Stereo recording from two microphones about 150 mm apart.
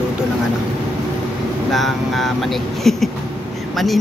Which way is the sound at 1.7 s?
Centre (ahead or behind).